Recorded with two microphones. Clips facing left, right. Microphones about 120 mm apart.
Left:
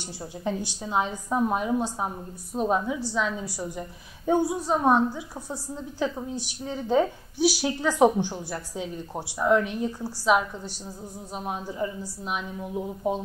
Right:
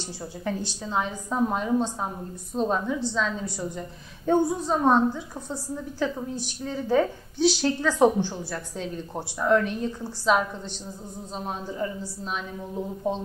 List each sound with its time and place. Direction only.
0.7 s a woman's voice: 15° left (ahead or behind)